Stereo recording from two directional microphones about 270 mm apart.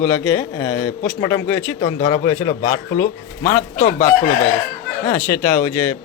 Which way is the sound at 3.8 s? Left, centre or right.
Left.